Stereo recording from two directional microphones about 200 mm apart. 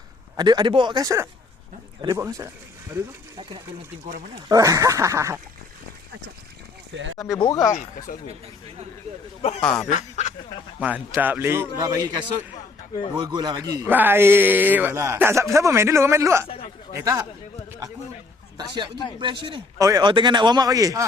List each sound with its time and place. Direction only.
0.3 s speech: 20° right (ahead or behind)
4.4 s speech: 15° right (ahead or behind)
6.9 s speech: 70° right (ahead or behind)
7.2 s speech: 20° left (ahead or behind)
7.7 s speech: 40° left (ahead or behind)
9.6 s speech: 5° left (ahead or behind)
9.9 s speech: 35° left (ahead or behind)
10.8 s speech: 5° right (ahead or behind)
13.1 s speech: 20° right (ahead or behind)
18.5 s a man's voice: 20° right (ahead or behind)